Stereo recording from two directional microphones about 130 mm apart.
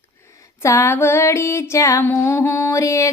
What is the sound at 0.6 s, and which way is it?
Music, 20° left (ahead or behind).